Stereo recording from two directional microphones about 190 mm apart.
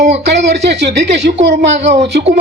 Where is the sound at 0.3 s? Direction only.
65° right (ahead or behind).